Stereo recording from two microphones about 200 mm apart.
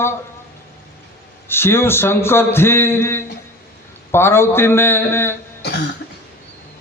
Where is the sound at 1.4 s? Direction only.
10° left (ahead or behind).